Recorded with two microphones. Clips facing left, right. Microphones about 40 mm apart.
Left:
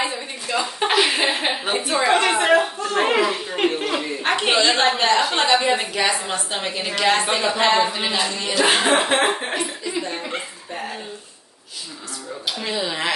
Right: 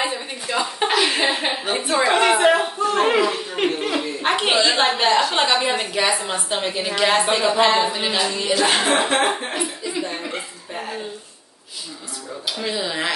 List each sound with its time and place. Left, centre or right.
0.8 s chuckle: centre
1.6 s a woman's voice: left
2.0 s a sound: centre
3.0 s chuckle: centre
4.3 s speech: centre
9.6 s chuckle: centre
12.5 s speech: centre